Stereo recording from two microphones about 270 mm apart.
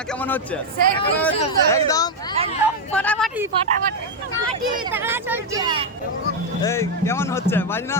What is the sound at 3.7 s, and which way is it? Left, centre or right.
Speech, right.